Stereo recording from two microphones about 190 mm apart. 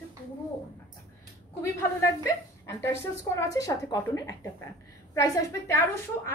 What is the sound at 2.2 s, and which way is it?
A woman's voice, 15° left (ahead or behind).